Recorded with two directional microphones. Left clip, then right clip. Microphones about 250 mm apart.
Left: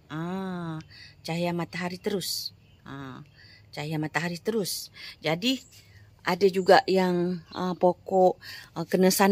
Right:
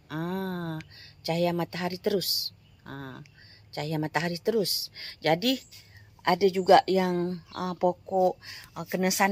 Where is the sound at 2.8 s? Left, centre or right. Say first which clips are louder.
Even; centre.